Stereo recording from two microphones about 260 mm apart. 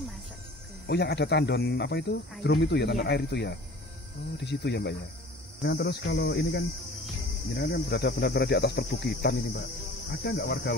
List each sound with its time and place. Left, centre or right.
0.8 s cricket: left